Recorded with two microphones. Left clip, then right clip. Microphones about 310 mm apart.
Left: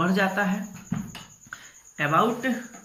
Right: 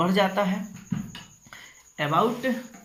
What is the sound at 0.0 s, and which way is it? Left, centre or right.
Speech, right.